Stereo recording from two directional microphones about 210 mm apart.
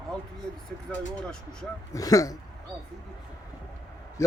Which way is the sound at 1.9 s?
15° left (ahead or behind).